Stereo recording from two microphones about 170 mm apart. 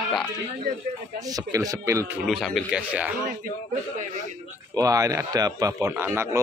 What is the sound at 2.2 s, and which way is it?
Speech, centre (ahead or behind).